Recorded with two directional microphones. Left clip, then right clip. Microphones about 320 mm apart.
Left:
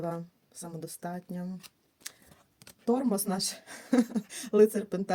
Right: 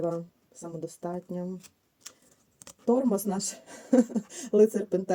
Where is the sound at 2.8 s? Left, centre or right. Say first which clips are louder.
Right 3 dB; left.